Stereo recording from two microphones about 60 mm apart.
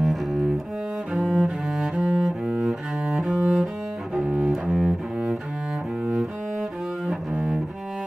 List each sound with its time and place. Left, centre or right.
0.0 s cello: centre
7.1 s cello: centre